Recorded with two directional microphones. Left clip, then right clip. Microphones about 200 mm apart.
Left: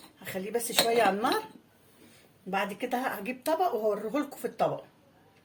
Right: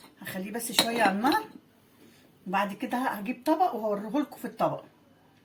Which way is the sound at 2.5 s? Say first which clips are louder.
Right 2 dB; 30° left (ahead or behind).